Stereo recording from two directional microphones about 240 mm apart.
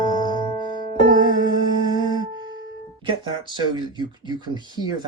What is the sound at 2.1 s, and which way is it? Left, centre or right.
Music, centre.